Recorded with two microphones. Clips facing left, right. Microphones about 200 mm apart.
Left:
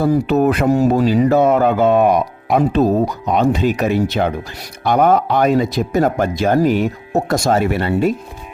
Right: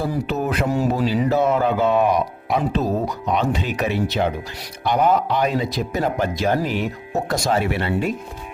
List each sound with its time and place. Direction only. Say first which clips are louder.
0.0 s speech: left 9 dB; 60° left (ahead or behind)
0.7 s speech: left 6 dB; 45° left (ahead or behind)